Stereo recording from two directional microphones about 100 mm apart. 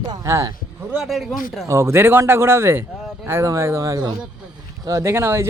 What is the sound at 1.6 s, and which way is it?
Speech, 30° right (ahead or behind).